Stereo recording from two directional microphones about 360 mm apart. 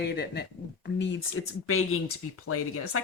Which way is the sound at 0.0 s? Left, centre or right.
Left.